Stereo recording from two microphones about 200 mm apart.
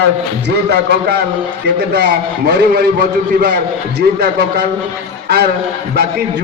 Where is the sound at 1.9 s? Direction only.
55° right (ahead or behind).